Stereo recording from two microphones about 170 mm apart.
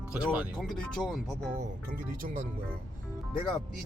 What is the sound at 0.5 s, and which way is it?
Speech, centre (ahead or behind).